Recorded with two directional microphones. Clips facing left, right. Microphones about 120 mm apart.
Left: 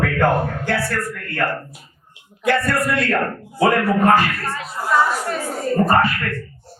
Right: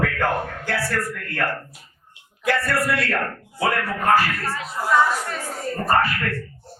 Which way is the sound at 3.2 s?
25° left (ahead or behind).